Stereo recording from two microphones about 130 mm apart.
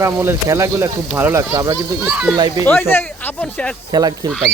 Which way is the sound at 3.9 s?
30° right (ahead or behind).